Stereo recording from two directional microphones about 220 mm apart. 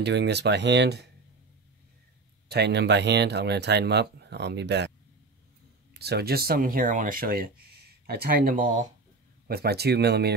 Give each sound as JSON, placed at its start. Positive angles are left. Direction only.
{"t": 0.0, "sound": "speech", "side_deg": -50}
{"t": 2.4, "sound": "speech", "side_deg": -50}
{"t": 5.9, "sound": "speech", "side_deg": -45}